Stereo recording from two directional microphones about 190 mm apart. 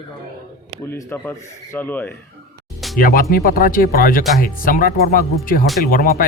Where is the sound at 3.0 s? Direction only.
50° left (ahead or behind).